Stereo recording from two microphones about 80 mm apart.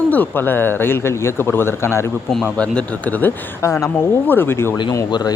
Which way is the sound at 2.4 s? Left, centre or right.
Centre.